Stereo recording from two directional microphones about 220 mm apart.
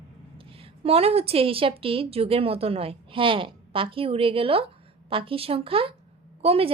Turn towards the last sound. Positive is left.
turn(degrees=-25)  # may be behind; listen again after turning